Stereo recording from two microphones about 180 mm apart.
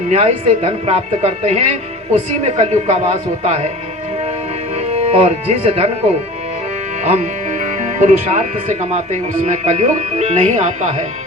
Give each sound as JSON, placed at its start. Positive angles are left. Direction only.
{"t": 0.1, "sound": "speech", "side_deg": -35}
{"t": 4.9, "sound": "speech", "side_deg": -35}